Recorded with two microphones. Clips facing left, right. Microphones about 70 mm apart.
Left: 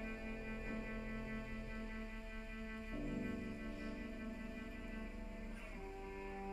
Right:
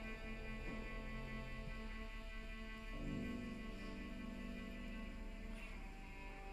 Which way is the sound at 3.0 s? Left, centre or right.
Centre.